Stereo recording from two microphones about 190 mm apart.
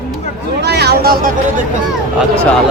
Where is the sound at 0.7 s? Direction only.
60° right (ahead or behind).